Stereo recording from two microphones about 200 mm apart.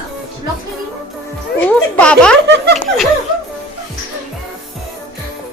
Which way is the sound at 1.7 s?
5° left (ahead or behind).